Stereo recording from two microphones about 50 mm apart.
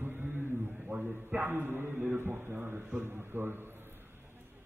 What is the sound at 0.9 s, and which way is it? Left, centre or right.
Speech, right.